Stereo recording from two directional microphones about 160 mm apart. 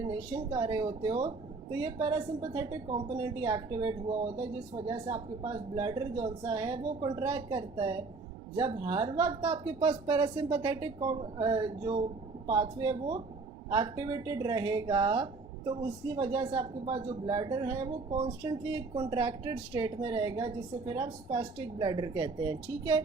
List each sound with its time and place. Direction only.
0.5 s speech: 30° right (ahead or behind)